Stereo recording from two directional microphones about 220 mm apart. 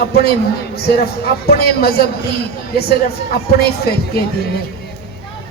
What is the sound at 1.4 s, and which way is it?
Speech, 45° left (ahead or behind).